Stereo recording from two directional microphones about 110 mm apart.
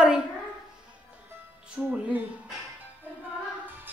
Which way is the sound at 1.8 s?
5° right (ahead or behind).